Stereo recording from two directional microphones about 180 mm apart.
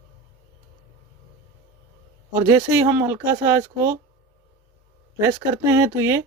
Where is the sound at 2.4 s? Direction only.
15° right (ahead or behind).